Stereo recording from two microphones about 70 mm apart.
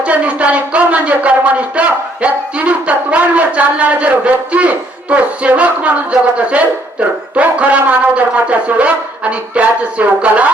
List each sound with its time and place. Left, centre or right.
0.0 s speech: centre